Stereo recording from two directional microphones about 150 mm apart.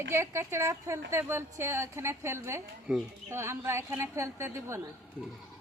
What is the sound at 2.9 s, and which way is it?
Speech, 5° right (ahead or behind).